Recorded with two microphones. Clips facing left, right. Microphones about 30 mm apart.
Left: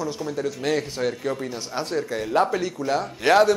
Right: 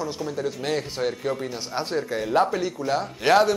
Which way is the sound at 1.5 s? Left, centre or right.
Centre.